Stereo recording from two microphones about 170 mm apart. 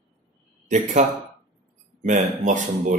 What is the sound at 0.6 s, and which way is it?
Speech, 45° right (ahead or behind).